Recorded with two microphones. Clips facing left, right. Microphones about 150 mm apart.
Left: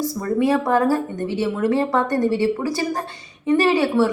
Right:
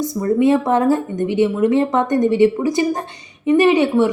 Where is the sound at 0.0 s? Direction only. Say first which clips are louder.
Right 4 dB; 20° right (ahead or behind).